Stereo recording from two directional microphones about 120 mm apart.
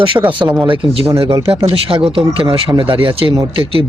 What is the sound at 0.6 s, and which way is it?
Speech, 45° right (ahead or behind).